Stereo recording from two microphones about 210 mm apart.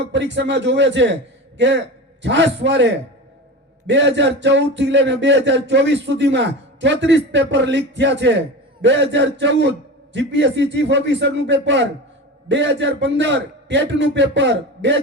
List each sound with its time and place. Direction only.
0.1 s speech: 60° right (ahead or behind)